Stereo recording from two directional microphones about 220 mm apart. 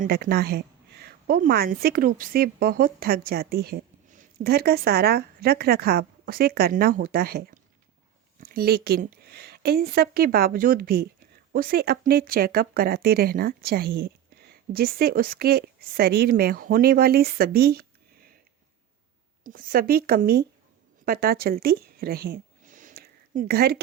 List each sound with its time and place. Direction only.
0.0 s a woman's voice: 45° right (ahead or behind)
19.5 s a woman's voice: 40° right (ahead or behind)